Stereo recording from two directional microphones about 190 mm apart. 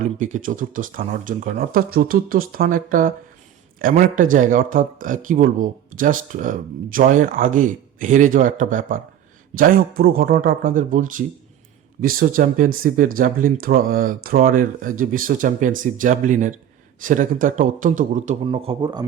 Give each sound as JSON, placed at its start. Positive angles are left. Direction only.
{"t": 0.0, "sound": "a man's voice", "side_deg": -40}
{"t": 18.4, "sound": "speech", "side_deg": -30}